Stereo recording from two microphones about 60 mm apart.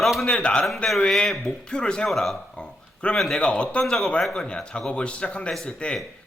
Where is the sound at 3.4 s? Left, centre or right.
Centre.